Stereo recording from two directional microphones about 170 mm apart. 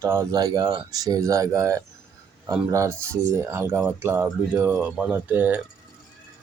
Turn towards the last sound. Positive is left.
turn(degrees=-10)  # may be behind; listen again after turning